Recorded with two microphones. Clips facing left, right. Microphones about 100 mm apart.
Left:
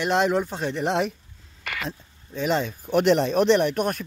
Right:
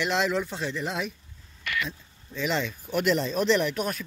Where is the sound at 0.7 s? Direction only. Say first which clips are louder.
Left 7 dB; 70° left (ahead or behind).